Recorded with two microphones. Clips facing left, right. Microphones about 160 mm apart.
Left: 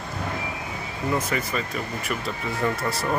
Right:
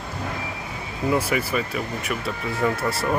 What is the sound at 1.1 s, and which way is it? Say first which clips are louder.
Speech: right 3 dB; 10° right (ahead or behind).